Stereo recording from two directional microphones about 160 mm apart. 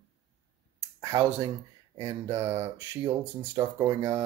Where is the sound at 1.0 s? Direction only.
25° right (ahead or behind).